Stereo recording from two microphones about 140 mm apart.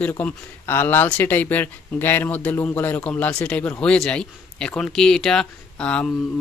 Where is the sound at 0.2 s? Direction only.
15° left (ahead or behind).